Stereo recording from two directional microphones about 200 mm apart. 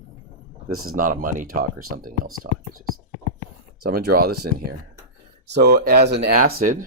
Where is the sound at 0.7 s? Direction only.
90° right.